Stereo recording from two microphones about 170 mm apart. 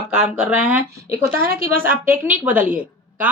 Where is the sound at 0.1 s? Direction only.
5° right (ahead or behind).